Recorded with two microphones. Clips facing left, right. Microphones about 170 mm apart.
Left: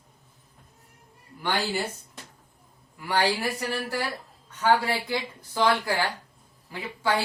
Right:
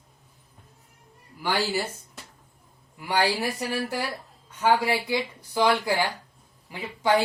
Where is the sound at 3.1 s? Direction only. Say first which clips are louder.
Even; 15° right (ahead or behind).